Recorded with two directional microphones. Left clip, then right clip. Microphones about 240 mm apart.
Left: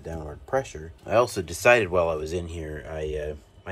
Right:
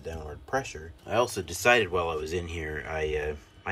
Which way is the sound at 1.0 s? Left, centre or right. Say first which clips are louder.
Left 5 dB; centre.